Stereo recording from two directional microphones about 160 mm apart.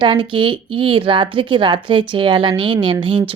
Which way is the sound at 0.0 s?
30° right (ahead or behind).